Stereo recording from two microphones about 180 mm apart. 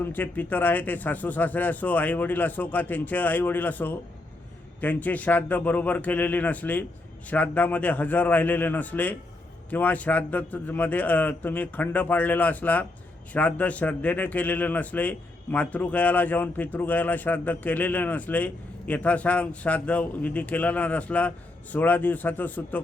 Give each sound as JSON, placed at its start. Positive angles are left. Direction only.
{"t": 0.0, "sound": "a man's voice", "side_deg": 10}